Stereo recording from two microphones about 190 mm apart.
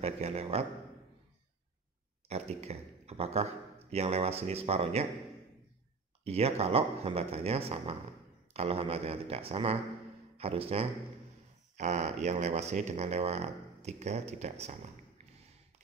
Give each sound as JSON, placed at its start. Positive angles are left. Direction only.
{"t": 0.0, "sound": "speech", "side_deg": -35}
{"t": 2.2, "sound": "speech", "side_deg": -35}
{"t": 6.2, "sound": "speech", "side_deg": -35}